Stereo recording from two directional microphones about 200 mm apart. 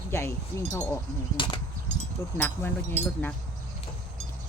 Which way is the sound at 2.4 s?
10° left (ahead or behind).